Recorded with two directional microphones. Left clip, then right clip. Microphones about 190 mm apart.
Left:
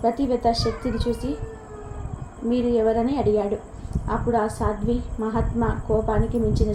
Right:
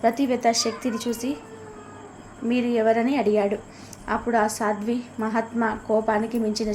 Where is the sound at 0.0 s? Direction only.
55° right (ahead or behind).